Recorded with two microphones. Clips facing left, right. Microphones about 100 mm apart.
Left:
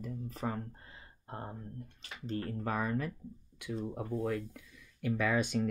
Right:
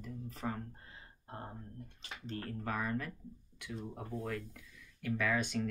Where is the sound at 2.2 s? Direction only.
15° left (ahead or behind).